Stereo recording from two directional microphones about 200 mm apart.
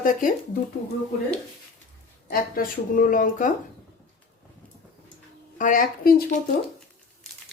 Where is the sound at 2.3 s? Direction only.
45° left (ahead or behind).